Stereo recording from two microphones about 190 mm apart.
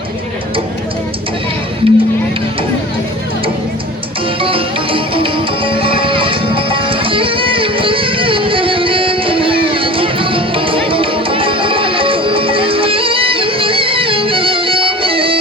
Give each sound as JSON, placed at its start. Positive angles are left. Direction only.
{"t": 1.8, "sound": "music", "side_deg": -30}
{"t": 4.4, "sound": "music", "side_deg": -30}